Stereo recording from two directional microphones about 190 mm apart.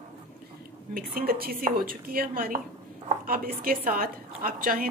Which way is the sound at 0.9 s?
50° right (ahead or behind).